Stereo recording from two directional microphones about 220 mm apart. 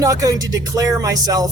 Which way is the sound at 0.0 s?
15° right (ahead or behind).